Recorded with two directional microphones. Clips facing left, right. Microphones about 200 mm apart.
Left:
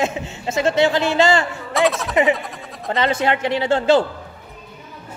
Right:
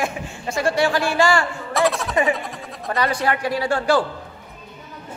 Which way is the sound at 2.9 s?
25° left (ahead or behind).